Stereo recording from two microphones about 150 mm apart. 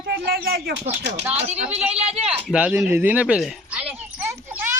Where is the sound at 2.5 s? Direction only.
10° right (ahead or behind).